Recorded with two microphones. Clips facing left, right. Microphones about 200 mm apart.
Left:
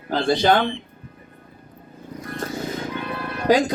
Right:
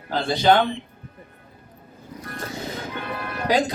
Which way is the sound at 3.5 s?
45° left (ahead or behind).